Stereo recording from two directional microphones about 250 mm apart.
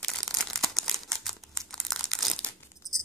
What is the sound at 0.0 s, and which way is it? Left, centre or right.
Crumpling, centre.